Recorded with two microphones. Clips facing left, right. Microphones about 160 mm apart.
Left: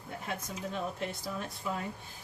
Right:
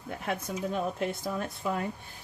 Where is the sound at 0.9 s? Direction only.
55° right (ahead or behind).